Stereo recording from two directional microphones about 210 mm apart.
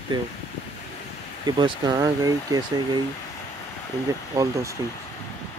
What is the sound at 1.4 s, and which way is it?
Speech, 20° right (ahead or behind).